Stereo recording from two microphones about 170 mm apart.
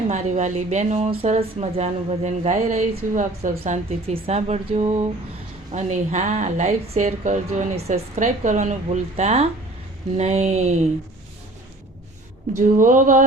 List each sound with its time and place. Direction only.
0.1 s speech: 45° right (ahead or behind)
3.6 s speech: 35° right (ahead or behind)
12.6 s speech: 50° right (ahead or behind)